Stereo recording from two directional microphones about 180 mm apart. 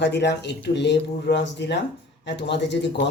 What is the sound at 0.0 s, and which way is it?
A man's voice, 75° left (ahead or behind).